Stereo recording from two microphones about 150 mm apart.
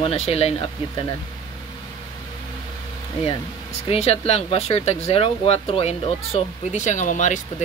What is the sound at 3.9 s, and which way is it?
Speech, 40° left (ahead or behind).